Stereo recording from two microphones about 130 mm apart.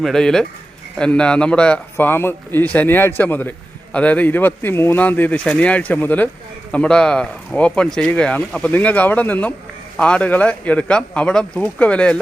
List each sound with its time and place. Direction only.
0.0 s speech: 5° left (ahead or behind)